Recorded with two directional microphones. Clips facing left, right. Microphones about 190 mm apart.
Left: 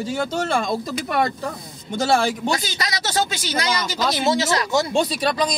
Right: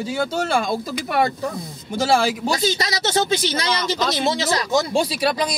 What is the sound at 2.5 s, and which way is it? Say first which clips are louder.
Speech: right 3 dB; 25° right (ahead or behind).